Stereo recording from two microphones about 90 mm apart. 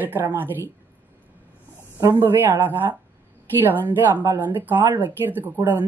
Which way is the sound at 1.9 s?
25° right (ahead or behind).